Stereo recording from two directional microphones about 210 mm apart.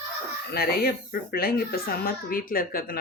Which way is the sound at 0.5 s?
45° left (ahead or behind).